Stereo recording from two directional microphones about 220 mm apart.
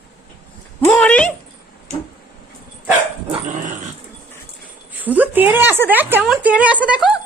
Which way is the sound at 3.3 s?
35° right (ahead or behind).